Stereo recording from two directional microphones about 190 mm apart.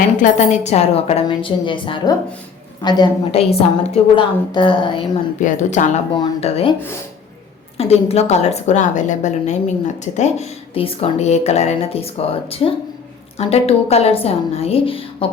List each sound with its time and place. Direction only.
0.2 s a woman's voice: 35° left (ahead or behind)
5.4 s a woman's voice: 40° left (ahead or behind)
6.1 s a woman's voice: 25° left (ahead or behind)
7.8 s a woman's voice: 30° left (ahead or behind)